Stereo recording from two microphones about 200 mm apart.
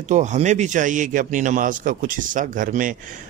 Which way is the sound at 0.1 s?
35° right (ahead or behind).